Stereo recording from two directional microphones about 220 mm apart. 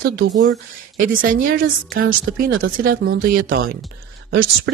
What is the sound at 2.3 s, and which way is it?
Speech, 50° right (ahead or behind).